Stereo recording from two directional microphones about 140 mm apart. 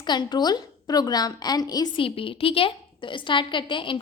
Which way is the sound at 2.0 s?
40° left (ahead or behind).